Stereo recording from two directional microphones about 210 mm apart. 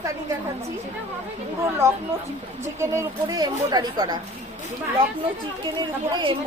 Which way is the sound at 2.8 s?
15° right (ahead or behind).